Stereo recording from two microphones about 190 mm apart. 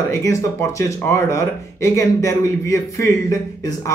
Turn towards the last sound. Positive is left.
turn(degrees=15)  # may be behind; listen again after turning